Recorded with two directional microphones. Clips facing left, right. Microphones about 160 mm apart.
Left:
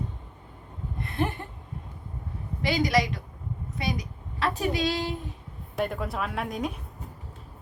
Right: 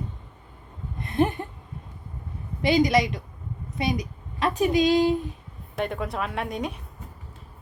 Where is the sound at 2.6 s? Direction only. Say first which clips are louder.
Right 4 dB; 20° right (ahead or behind).